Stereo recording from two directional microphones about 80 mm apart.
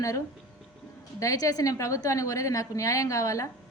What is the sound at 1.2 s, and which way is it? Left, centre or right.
A woman's voice, left.